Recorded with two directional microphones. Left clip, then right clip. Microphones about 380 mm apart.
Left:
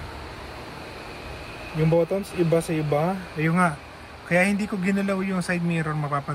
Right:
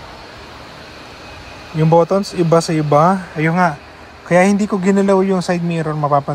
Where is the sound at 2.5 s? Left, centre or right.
Right.